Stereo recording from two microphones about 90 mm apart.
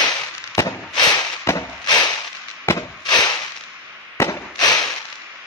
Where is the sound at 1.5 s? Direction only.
30° left (ahead or behind).